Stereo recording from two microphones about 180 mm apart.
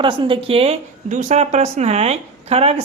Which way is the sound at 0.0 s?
30° right (ahead or behind).